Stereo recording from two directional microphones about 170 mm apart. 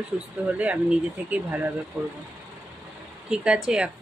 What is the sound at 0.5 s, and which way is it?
Speech, 10° right (ahead or behind).